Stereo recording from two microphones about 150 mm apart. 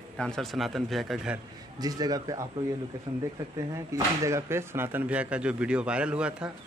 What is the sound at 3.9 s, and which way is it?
Speech, 20° right (ahead or behind).